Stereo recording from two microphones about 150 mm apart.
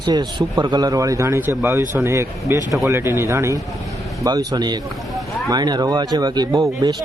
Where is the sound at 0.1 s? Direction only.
30° right (ahead or behind).